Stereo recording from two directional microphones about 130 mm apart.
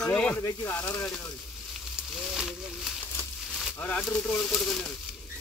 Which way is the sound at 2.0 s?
5° right (ahead or behind).